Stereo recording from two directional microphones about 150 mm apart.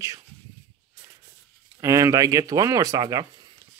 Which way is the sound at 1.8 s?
20° right (ahead or behind).